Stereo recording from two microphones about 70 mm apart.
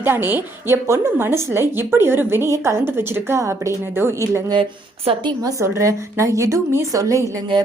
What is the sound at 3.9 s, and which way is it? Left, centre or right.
Speech, right.